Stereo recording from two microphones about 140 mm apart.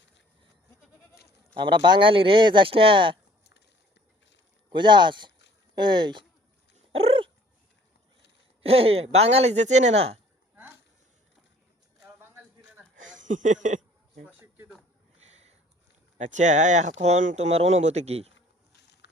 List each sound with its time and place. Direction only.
1.5 s a man's voice: 35° right (ahead or behind)
4.7 s a man's voice: 35° right (ahead or behind)
6.7 s dog: 45° right (ahead or behind)
8.6 s speech: 45° right (ahead or behind)
12.0 s a sound: 15° right (ahead or behind)
13.0 s speech: 65° right (ahead or behind)
14.3 s a sound: 10° right (ahead or behind)
15.3 s sniff: 50° right (ahead or behind)
16.1 s speech: 55° right (ahead or behind)